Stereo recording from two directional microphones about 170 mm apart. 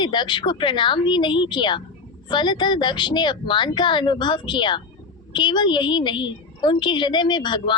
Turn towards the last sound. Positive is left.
turn(degrees=25)  # may be behind; listen again after turning